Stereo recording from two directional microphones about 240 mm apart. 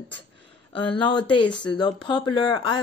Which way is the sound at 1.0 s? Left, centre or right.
Centre.